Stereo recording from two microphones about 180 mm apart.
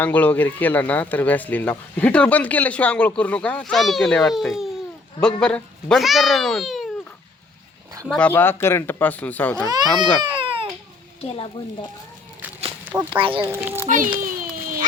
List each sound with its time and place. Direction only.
0.0 s speech: 10° left (ahead or behind)
8.0 s speech: 5° left (ahead or behind)
10.2 s baby cry: 30° right (ahead or behind)
11.2 s speech: 30° left (ahead or behind)
12.8 s a sound: 10° right (ahead or behind)
13.1 s a child's voice: 30° right (ahead or behind)
13.4 s a child's voice: 10° right (ahead or behind)
13.8 s a child's voice: 45° right (ahead or behind)
14.2 s a sound: 50° right (ahead or behind)